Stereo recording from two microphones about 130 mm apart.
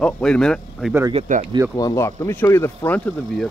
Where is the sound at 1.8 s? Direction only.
25° left (ahead or behind).